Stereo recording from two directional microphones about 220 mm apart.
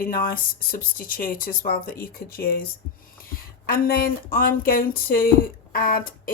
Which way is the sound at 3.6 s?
40° left (ahead or behind).